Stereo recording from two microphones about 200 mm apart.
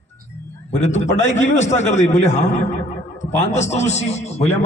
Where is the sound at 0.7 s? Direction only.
35° left (ahead or behind).